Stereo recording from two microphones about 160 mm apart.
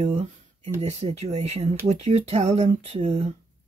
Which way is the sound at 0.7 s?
40° right (ahead or behind).